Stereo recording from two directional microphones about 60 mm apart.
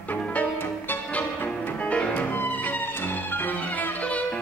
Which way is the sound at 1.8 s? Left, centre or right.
Centre.